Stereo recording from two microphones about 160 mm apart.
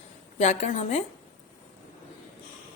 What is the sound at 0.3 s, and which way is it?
Speech, 45° left (ahead or behind).